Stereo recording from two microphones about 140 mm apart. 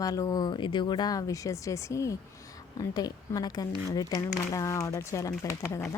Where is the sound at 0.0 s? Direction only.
25° left (ahead or behind).